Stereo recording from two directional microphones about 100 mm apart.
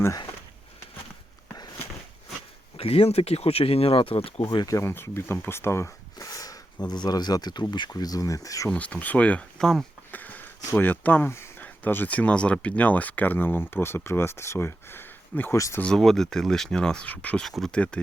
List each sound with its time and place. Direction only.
2.7 s speech: 75° left (ahead or behind)
4.4 s speech: 40° left (ahead or behind)
4.8 s speech: 25° left (ahead or behind)
8.7 s speech: 15° left (ahead or behind)
10.1 s a sound: 15° left (ahead or behind)
10.8 s speech: 15° left (ahead or behind)
15.5 s speech: 35° left (ahead or behind)
15.8 s speech: 5° left (ahead or behind)